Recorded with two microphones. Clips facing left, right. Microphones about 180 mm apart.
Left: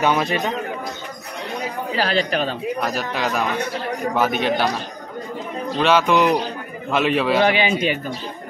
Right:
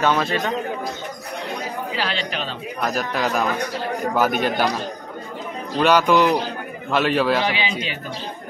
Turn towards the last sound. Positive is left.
turn(degrees=55)  # may be behind; listen again after turning